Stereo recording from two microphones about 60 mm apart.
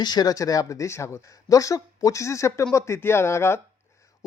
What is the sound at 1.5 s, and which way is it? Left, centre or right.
Speech, left.